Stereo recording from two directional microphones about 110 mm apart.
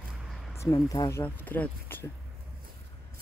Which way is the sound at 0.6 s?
25° left (ahead or behind).